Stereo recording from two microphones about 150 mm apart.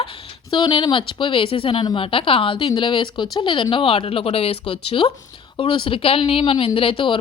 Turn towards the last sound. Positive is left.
turn(degrees=35)  # may be behind; listen again after turning